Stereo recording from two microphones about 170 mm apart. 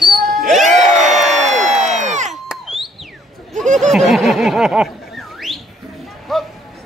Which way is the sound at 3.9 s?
Centre (ahead or behind).